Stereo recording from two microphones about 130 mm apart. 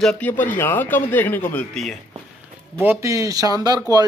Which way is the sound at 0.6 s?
15° left (ahead or behind).